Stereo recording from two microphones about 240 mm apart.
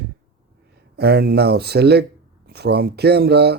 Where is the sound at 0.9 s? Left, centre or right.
Right.